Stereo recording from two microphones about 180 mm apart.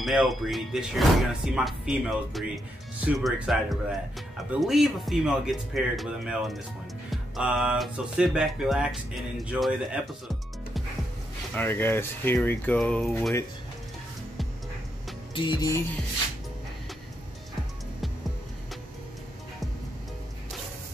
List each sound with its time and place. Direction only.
0.0 s speech: centre (ahead or behind)
11.5 s speech: 10° left (ahead or behind)
15.3 s music: 25° left (ahead or behind)